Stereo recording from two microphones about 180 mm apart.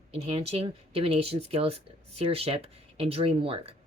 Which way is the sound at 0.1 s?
35° right (ahead or behind).